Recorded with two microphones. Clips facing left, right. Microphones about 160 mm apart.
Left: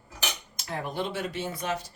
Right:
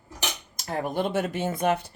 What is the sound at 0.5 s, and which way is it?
Speech, 45° right (ahead or behind).